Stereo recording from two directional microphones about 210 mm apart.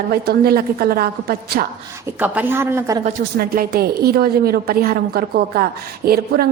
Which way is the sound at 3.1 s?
45° right (ahead or behind).